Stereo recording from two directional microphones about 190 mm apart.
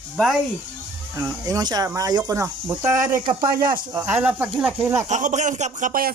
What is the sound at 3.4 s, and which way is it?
Speech, 50° right (ahead or behind).